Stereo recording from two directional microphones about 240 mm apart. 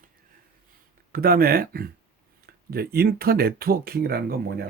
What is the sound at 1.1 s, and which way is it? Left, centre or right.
Speech, right.